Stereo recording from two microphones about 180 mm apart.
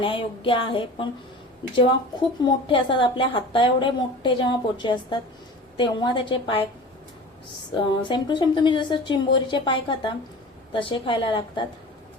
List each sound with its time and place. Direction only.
0.0 s a woman's voice: 30° left (ahead or behind)
2.4 s a woman's voice: 25° left (ahead or behind)
7.7 s a woman's voice: 25° left (ahead or behind)